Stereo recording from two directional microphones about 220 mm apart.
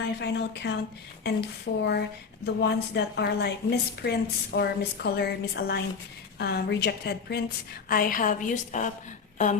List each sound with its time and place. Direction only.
0.2 s a woman's voice: 50° left (ahead or behind)